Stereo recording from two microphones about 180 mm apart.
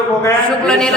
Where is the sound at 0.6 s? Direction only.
5° left (ahead or behind).